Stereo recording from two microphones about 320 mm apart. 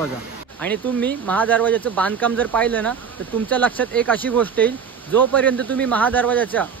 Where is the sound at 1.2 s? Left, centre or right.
Centre.